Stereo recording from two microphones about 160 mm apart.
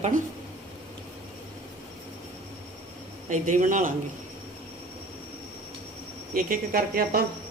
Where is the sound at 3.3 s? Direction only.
55° right (ahead or behind).